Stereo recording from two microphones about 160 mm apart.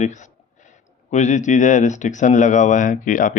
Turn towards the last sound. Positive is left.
turn(degrees=55)  # may be behind; listen again after turning